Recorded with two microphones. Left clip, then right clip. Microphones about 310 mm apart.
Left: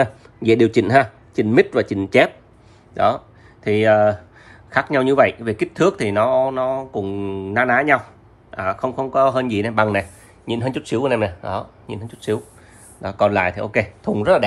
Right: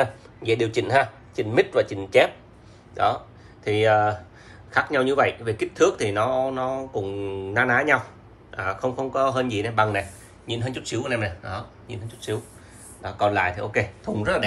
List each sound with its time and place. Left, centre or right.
0.0 s speech: left